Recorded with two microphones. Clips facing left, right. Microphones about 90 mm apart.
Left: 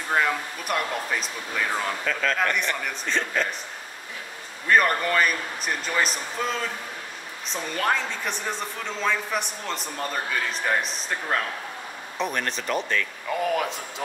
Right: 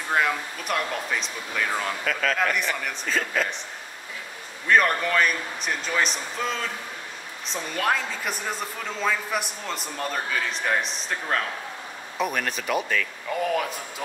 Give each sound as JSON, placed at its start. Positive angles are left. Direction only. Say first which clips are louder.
{"t": 0.1, "sound": "a woman's voice", "louder": "even", "side_deg": 0}
{"t": 4.6, "sound": "a woman's voice", "louder": "even", "side_deg": 0}